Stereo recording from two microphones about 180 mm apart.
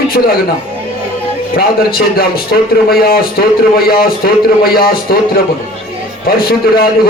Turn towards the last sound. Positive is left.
turn(degrees=55)  # may be behind; listen again after turning